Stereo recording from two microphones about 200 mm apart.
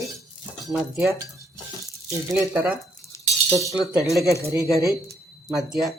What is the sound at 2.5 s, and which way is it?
Speech, 5° right (ahead or behind).